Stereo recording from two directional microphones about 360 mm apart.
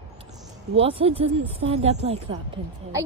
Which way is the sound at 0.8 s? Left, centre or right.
Centre.